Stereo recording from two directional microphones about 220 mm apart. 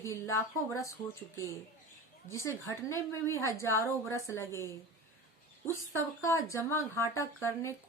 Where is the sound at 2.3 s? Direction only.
10° left (ahead or behind).